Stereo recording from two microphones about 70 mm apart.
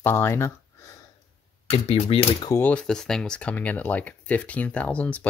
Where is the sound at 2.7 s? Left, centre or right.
Centre.